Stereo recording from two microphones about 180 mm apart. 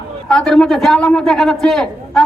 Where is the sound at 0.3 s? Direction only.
5° left (ahead or behind).